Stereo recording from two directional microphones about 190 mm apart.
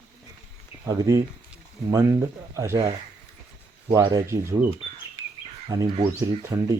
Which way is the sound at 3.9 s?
20° right (ahead or behind).